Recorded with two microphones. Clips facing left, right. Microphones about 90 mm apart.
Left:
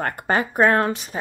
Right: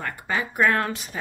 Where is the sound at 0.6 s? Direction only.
30° left (ahead or behind).